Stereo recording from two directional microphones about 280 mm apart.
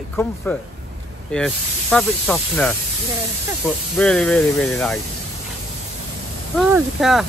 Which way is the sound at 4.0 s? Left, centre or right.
Centre.